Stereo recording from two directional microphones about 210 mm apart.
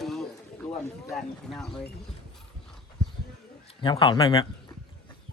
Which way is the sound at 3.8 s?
20° left (ahead or behind).